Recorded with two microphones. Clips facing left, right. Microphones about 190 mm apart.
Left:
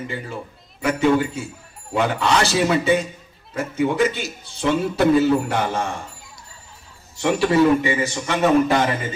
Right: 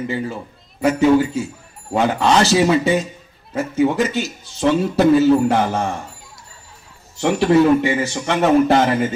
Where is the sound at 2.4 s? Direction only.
60° left (ahead or behind).